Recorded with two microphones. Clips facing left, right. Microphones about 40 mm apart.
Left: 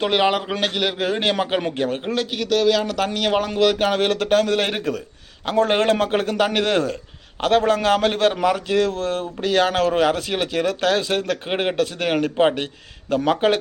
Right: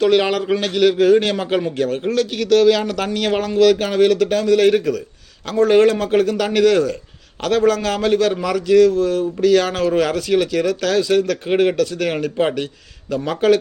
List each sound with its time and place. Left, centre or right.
0.0 s speech: centre
2.3 s a man's voice: centre
3.6 s speech: left
3.9 s a man's voice: left
8.9 s a man's voice: left
10.0 s speech: left
11.3 s a man's voice: left